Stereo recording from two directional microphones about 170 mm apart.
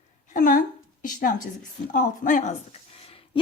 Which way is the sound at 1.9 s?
50° left (ahead or behind).